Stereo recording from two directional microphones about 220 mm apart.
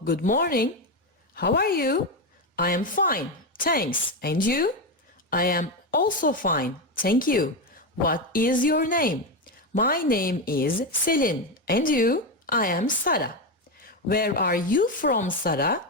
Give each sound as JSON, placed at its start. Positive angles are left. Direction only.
{"t": 0.0, "sound": "a woman's voice", "side_deg": 40}